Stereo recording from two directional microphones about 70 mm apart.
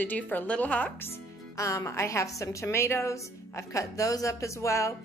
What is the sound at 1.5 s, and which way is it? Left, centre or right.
A woman's voice, left.